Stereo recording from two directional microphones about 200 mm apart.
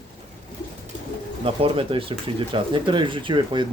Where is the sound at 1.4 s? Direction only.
25° right (ahead or behind).